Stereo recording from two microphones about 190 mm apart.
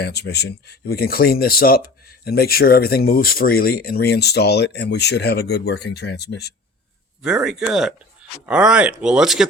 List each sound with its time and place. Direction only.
0.0 s speech: 60° left (ahead or behind)
7.2 s speech: 5° right (ahead or behind)